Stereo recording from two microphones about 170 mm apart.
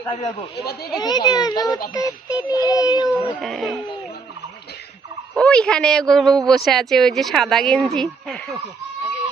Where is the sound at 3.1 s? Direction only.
Centre (ahead or behind).